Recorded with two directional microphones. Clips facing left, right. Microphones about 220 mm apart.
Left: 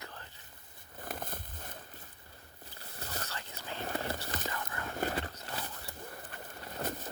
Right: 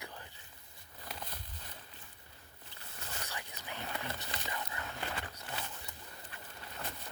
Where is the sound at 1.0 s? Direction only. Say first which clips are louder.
Left 6 dB; 50° left (ahead or behind).